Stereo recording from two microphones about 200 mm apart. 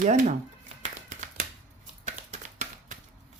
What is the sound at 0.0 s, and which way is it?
Speech, 35° right (ahead or behind).